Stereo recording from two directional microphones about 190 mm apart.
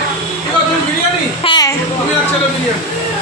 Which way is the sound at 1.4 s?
20° left (ahead or behind).